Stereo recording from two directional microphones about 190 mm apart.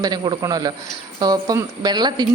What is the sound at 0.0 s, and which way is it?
A woman's voice, 20° right (ahead or behind).